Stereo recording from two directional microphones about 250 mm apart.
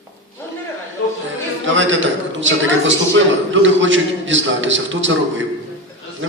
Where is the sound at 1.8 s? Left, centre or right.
Right.